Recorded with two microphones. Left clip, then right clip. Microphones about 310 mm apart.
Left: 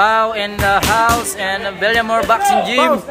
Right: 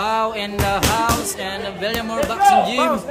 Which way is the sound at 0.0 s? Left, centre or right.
Centre.